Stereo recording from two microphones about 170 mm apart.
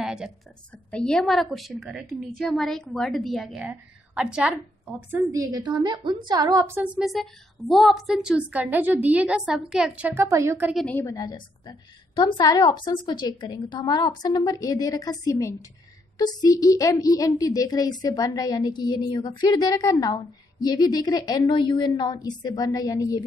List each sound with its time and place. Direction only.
0.0 s a sound: 5° right (ahead or behind)
0.9 s a woman's voice: 5° left (ahead or behind); by 6.8 s 20° right (ahead or behind)
6.8 s a woman's voice: centre (ahead or behind)
10.7 s a woman's voice: centre (ahead or behind)
11.0 s speech: 20° left (ahead or behind)